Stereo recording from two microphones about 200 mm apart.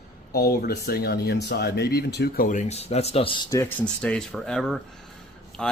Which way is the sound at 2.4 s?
35° left (ahead or behind).